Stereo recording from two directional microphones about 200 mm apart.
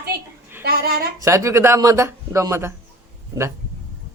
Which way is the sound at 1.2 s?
15° right (ahead or behind).